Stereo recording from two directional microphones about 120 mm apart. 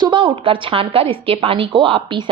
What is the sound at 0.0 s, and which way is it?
A woman's voice, 45° right (ahead or behind).